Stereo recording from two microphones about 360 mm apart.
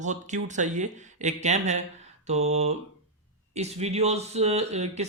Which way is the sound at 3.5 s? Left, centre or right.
Centre.